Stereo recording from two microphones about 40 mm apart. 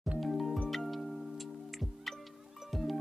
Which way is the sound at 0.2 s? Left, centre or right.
Centre.